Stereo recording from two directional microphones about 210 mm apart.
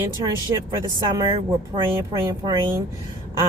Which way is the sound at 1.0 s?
20° right (ahead or behind).